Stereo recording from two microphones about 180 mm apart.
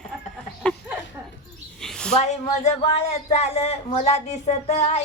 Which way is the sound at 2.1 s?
40° left (ahead or behind).